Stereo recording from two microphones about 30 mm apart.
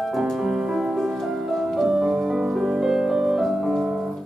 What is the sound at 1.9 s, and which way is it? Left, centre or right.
Music, centre.